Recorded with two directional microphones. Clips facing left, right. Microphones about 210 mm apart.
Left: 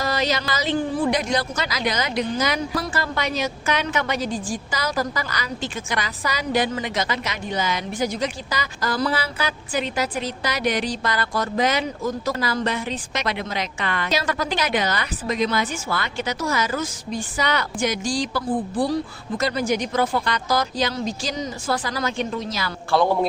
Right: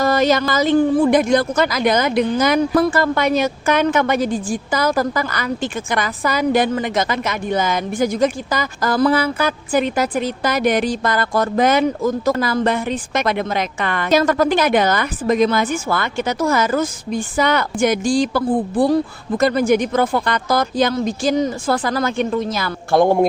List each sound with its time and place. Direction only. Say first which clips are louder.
0.0 s a woman's voice: right 8 dB; 50° right (ahead or behind)